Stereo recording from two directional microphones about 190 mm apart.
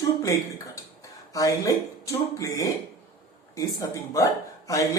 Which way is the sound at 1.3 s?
15° left (ahead or behind).